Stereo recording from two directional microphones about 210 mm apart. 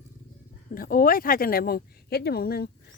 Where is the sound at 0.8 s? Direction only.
40° left (ahead or behind).